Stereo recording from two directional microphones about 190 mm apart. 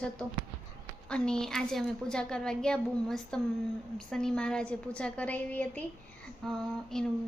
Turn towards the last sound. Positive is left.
turn(degrees=0)  # may be behind; listen again after turning